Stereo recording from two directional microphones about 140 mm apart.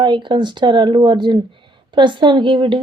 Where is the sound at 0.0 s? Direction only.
35° right (ahead or behind).